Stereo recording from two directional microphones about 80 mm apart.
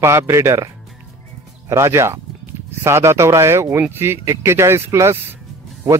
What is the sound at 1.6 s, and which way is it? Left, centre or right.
Speech, right.